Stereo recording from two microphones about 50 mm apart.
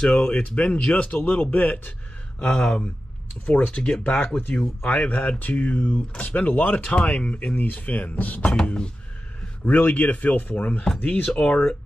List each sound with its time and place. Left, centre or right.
0.1 s speech: left
2.4 s speech: centre
3.4 s speech: left
8.5 s speech: centre
9.7 s speech: left
11.2 s speech: left